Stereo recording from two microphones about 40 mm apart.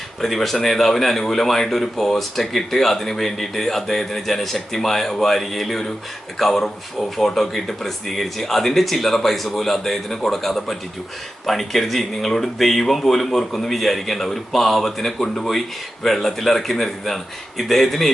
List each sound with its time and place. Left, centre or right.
0.2 s a man's voice: centre